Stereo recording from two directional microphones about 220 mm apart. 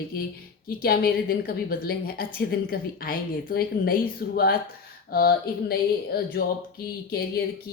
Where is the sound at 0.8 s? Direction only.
45° left (ahead or behind).